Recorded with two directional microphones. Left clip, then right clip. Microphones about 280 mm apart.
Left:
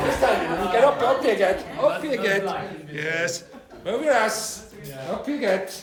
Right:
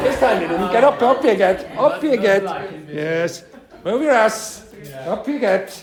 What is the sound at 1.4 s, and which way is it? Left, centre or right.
A man's voice, right.